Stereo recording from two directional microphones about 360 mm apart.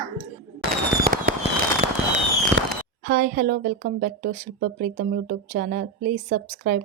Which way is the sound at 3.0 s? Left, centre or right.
Right.